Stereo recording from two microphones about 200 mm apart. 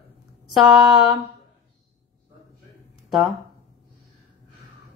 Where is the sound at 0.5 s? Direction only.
Centre (ahead or behind).